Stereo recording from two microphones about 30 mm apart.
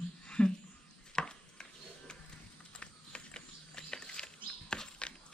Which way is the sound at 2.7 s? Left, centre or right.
Left.